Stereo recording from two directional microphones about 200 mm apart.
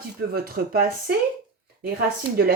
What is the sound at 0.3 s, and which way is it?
Speech, 45° right (ahead or behind).